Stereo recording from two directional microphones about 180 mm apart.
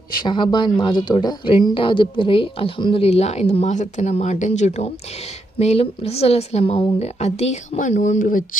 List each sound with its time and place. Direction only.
0.1 s a woman's voice: 25° left (ahead or behind); by 8.4 s 50° left (ahead or behind)